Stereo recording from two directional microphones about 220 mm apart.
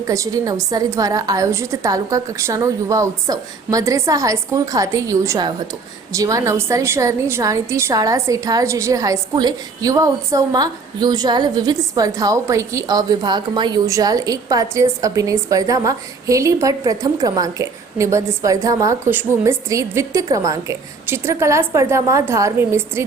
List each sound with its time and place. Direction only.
0.0 s a woman's voice: 15° right (ahead or behind)